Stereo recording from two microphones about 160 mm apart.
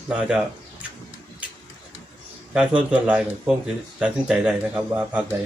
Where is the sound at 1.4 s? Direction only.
5° right (ahead or behind).